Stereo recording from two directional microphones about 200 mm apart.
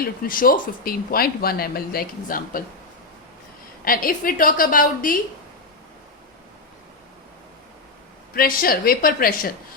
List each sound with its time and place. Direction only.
0.0 s speech: 45° left (ahead or behind)
3.8 s speech: 45° left (ahead or behind)
8.4 s speech: 45° left (ahead or behind)